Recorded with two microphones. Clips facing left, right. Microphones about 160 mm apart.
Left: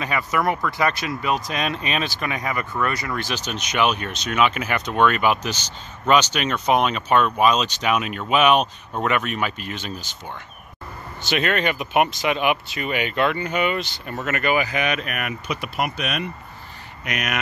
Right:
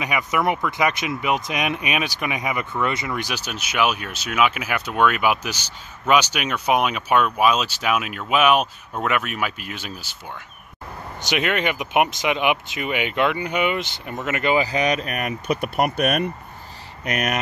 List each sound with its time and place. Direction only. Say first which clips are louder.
0.0 s speech: even; 15° right (ahead or behind)
3.2 s speech: left 1 dB; 10° right (ahead or behind)
11.2 s speech: left 1 dB; 15° right (ahead or behind); by 15.3 s 35° right (ahead or behind)
15.4 s speech: right 6 dB; 50° right (ahead or behind)